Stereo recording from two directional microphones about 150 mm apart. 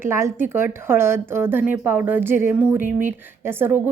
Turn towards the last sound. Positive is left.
turn(degrees=-15)  # may be behind; listen again after turning